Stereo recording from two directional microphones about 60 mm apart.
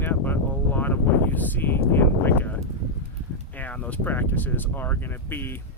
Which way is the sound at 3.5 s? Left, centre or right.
Left.